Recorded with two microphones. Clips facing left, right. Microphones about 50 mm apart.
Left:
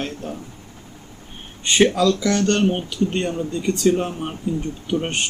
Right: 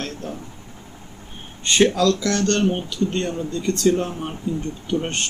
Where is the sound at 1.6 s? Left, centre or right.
Centre.